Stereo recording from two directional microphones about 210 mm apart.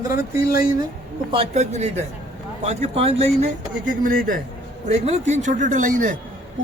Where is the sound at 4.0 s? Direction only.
40° right (ahead or behind).